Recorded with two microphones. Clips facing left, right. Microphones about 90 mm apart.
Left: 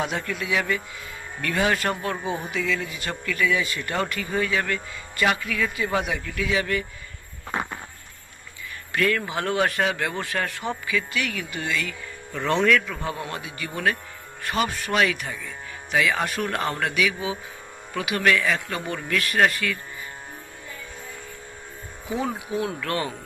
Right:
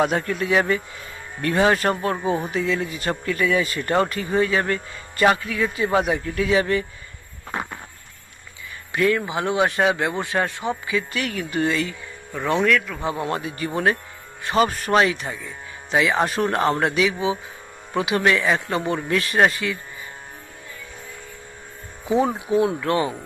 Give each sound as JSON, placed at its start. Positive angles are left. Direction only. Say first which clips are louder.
{"t": 0.0, "sound": "a man's voice", "louder": "right 6 dB", "side_deg": -45}
{"t": 8.9, "sound": "a man's voice", "louder": "right 3 dB", "side_deg": -20}
{"t": 11.1, "sound": "a man's voice", "louder": "right 3 dB", "side_deg": -40}
{"t": 12.3, "sound": "speech", "louder": "right 1 dB", "side_deg": -10}
{"t": 13.0, "sound": "a man's voice", "louder": "right 5 dB", "side_deg": -25}
{"t": 22.0, "sound": "a man's voice", "louder": "right 7 dB", "side_deg": -25}